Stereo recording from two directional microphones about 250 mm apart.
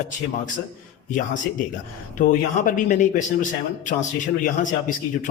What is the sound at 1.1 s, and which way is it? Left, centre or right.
Speech, left.